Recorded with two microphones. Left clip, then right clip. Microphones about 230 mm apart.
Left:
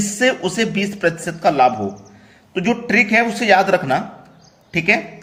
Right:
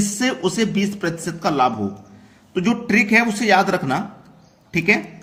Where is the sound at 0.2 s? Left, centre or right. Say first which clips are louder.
Left 5 dB; centre.